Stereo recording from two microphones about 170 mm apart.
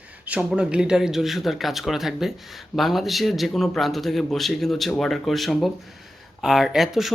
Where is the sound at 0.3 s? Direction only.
5° right (ahead or behind).